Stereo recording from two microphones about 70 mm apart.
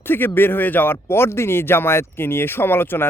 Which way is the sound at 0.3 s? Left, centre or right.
Left.